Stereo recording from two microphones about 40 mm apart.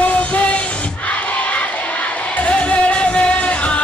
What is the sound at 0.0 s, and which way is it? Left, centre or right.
Music, left.